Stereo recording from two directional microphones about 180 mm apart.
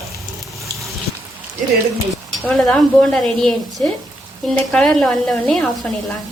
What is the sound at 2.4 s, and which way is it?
A woman's voice, 5° left (ahead or behind).